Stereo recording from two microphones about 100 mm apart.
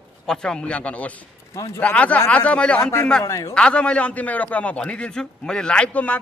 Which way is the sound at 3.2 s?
30° left (ahead or behind).